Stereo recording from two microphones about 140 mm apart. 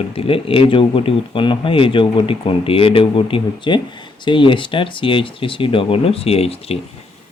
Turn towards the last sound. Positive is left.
turn(degrees=45)  # may be behind; listen again after turning